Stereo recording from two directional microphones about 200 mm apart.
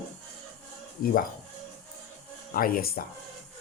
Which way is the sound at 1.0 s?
45° left (ahead or behind).